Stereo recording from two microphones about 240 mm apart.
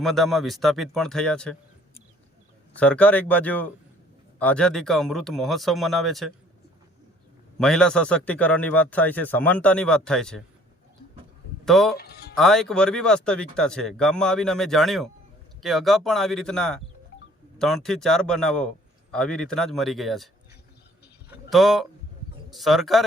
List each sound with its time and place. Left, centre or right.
0.0 s a man's voice: centre
2.7 s a man's voice: centre
7.6 s a man's voice: centre
11.6 s speech: centre
11.9 s speech: left
12.4 s a man's voice: centre
21.2 s a sound: centre
22.4 s a man's voice: centre